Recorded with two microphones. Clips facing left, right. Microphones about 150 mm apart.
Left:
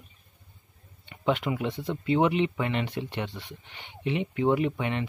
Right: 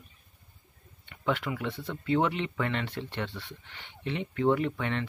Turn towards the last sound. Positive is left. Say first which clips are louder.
# left 2 dB
turn(degrees=15)  # may be behind; listen again after turning